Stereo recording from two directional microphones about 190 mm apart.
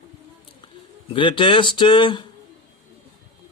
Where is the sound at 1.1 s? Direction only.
25° left (ahead or behind).